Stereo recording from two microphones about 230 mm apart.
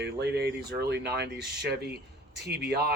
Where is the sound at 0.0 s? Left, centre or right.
Right.